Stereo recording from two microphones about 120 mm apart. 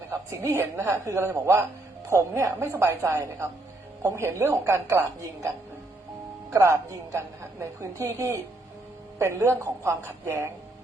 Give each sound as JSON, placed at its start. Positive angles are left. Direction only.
{"t": 0.1, "sound": "a woman's voice", "side_deg": -25}
{"t": 6.5, "sound": "a woman's voice", "side_deg": -25}